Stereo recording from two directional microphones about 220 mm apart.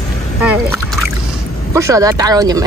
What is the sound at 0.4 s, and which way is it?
Speech, 5° right (ahead or behind).